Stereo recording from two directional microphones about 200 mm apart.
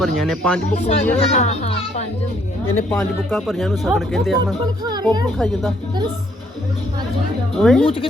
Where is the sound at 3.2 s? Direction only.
Centre (ahead or behind).